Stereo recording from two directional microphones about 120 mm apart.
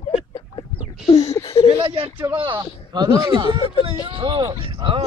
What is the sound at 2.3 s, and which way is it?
Speech, 45° right (ahead or behind).